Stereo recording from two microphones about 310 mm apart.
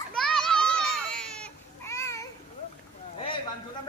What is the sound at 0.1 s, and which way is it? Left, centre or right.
Baby cry, centre.